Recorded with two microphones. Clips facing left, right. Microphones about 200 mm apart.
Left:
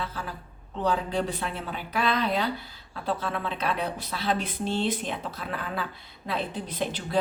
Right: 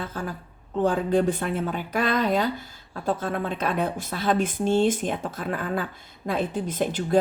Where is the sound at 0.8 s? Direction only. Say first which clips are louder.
Right 5 dB; 50° right (ahead or behind).